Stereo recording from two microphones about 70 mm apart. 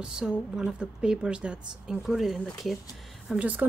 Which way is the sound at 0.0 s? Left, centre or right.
Centre.